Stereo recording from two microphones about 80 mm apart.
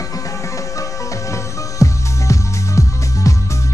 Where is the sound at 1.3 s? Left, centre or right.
Left.